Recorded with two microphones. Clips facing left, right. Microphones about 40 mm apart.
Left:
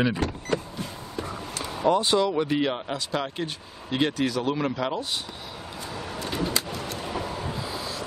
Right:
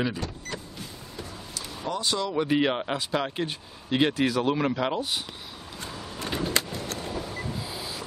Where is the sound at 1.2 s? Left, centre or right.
Left.